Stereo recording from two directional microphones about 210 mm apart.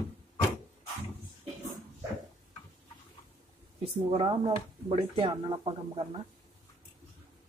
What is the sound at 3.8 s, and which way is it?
Speech, 25° right (ahead or behind).